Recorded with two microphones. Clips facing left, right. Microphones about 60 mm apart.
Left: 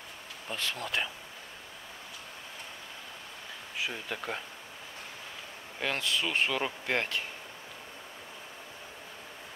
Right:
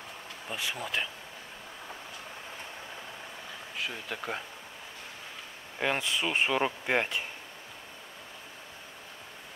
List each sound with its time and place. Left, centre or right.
0.5 s speech: centre
3.7 s speech: centre
5.8 s speech: centre